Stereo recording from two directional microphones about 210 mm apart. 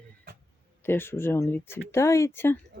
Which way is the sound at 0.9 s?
10° left (ahead or behind).